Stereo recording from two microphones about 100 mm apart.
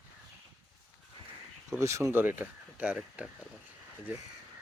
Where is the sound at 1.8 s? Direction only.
30° right (ahead or behind); by 3.2 s 15° right (ahead or behind).